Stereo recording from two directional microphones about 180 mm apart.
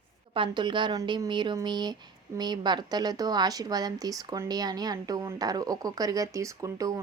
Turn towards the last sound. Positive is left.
turn(degrees=-20)  # may be behind; listen again after turning